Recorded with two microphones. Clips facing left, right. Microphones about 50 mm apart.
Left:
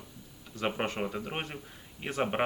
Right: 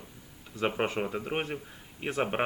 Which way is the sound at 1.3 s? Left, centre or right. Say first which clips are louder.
Right 5 dB; centre.